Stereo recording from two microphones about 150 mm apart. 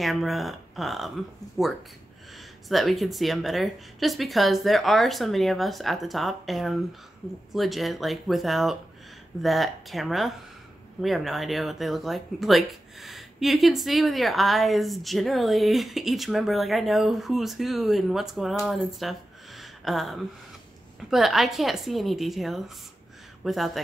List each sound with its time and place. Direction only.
0.0 s speech: centre (ahead or behind)
1.6 s speech: 20° right (ahead or behind)
2.3 s speech: centre (ahead or behind)